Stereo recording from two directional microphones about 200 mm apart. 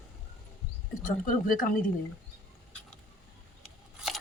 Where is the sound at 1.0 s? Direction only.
40° left (ahead or behind).